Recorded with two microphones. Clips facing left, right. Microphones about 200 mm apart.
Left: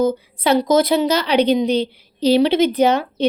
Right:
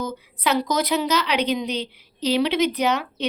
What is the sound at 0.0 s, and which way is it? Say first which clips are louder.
A woman's voice: left 9 dB; 30° left (ahead or behind).